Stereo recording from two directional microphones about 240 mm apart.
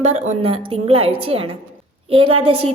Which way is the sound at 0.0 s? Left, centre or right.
Right.